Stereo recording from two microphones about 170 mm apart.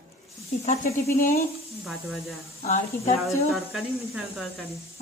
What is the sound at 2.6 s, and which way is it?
Speech, 35° left (ahead or behind).